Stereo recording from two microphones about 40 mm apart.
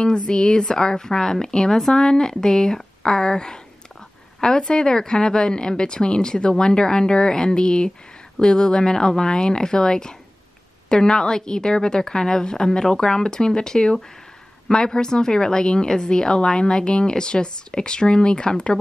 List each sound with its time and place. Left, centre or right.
0.0 s a woman's voice: left